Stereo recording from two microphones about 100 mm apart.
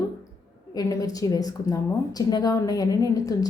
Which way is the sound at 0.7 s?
35° left (ahead or behind).